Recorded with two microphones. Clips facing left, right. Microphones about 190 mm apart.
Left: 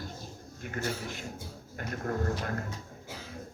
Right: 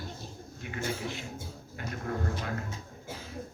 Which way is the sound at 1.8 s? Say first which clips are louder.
Left 2 dB; 50° left (ahead or behind).